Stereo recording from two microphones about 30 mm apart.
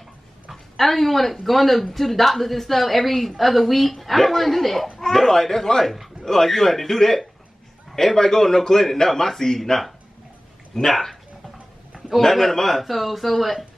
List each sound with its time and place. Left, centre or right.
0.5 s a woman's voice: centre
10.7 s a man's voice: centre
12.2 s a man's voice: centre